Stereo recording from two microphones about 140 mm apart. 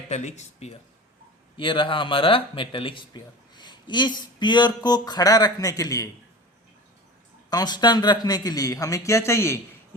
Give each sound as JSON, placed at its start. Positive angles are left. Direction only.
{"t": 0.1, "sound": "speech", "side_deg": 55}
{"t": 1.5, "sound": "speech", "side_deg": 35}
{"t": 7.5, "sound": "a man's voice", "side_deg": 30}